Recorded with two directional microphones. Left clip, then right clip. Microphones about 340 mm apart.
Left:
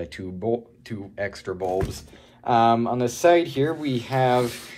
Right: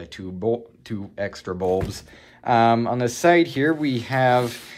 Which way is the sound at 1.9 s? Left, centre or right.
Right.